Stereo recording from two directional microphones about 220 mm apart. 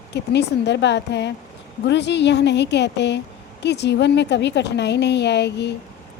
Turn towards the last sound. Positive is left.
turn(degrees=50)  # may be behind; listen again after turning